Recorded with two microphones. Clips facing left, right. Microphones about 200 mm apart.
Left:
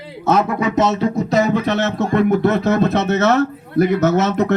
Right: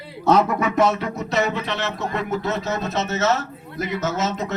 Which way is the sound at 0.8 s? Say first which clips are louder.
Left 4 dB; 25° left (ahead or behind).